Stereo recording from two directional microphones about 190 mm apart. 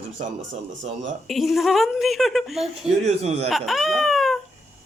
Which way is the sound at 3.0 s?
35° right (ahead or behind).